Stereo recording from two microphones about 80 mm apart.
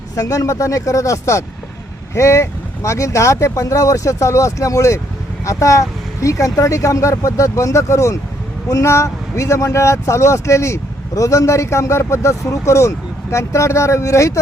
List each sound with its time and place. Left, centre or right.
0.2 s speech: left